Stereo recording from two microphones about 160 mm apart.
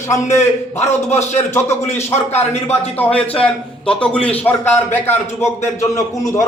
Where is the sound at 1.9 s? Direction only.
45° left (ahead or behind).